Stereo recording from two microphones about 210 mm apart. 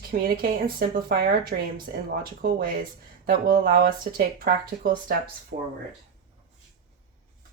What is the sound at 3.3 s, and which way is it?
Speech, 45° right (ahead or behind).